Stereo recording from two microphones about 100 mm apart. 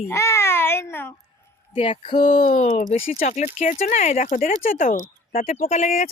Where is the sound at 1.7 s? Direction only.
65° left (ahead or behind).